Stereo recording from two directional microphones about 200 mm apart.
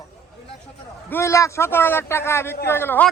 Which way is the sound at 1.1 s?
15° left (ahead or behind).